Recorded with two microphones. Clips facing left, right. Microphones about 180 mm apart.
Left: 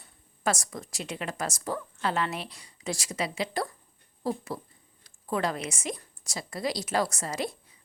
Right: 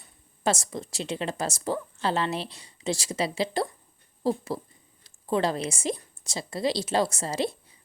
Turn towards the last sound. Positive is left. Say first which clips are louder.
# right 4 dB
turn(degrees=-30)  # may be behind; listen again after turning